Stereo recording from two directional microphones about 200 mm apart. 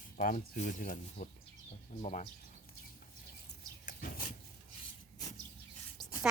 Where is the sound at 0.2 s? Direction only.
40° left (ahead or behind).